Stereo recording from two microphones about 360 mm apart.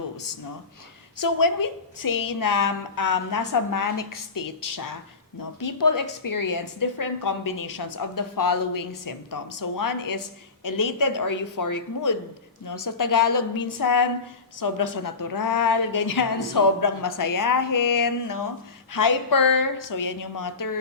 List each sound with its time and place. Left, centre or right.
1.2 s a woman's voice: left